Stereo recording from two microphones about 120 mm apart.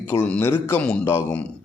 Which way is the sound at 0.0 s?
15° left (ahead or behind).